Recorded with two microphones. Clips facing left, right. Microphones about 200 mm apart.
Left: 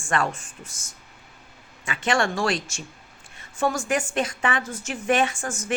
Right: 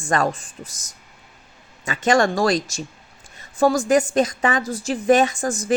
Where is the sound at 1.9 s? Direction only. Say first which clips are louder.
Right 6 dB; 40° right (ahead or behind).